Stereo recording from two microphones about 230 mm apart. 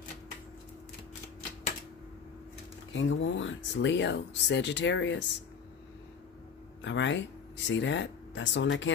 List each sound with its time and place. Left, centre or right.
2.9 s speech: left
6.8 s speech: left